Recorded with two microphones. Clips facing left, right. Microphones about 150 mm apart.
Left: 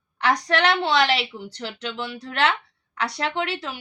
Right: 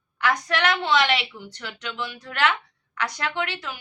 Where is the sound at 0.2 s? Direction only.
35° left (ahead or behind).